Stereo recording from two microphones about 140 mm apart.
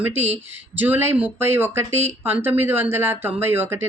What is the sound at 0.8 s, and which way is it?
Speech, 15° right (ahead or behind).